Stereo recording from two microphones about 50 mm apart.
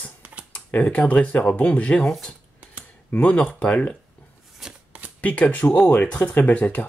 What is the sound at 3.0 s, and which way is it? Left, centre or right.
Speech, left.